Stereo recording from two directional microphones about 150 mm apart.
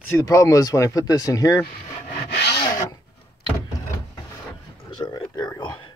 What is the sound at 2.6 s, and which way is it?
Rub, 25° left (ahead or behind).